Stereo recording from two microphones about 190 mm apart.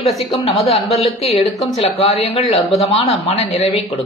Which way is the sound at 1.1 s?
30° left (ahead or behind).